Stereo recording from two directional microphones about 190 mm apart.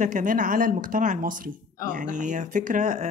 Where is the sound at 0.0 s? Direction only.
45° right (ahead or behind).